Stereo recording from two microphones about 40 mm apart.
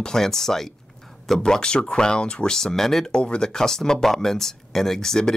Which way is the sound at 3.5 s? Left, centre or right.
Centre.